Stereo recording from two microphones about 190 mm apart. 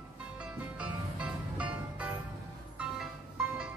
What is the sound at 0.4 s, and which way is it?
Music, 5° right (ahead or behind).